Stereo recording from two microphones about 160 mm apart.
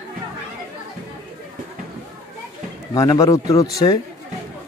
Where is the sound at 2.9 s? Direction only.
25° left (ahead or behind).